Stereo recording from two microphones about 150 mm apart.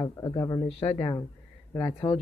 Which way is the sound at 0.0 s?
25° left (ahead or behind).